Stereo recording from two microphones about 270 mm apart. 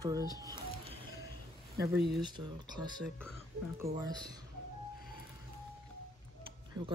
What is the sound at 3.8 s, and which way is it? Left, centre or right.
Speech, centre.